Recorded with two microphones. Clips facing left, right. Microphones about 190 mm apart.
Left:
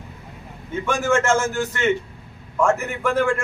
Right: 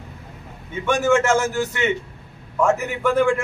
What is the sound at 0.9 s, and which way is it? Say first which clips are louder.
A man's voice: right 2 dB; 5° right (ahead or behind).